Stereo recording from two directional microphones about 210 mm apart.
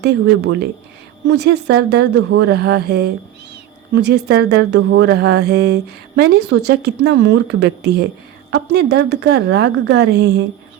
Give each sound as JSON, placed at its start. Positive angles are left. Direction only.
{"t": 0.0, "sound": "speech", "side_deg": -50}